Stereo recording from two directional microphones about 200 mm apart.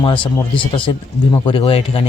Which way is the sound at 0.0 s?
25° left (ahead or behind).